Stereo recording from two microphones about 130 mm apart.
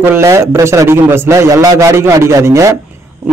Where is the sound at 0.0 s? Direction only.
20° right (ahead or behind).